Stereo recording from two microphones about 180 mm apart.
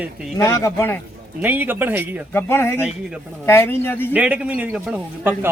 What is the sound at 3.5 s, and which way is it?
Speech, 10° left (ahead or behind).